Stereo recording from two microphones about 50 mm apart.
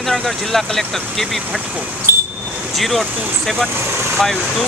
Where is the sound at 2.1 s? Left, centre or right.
Right.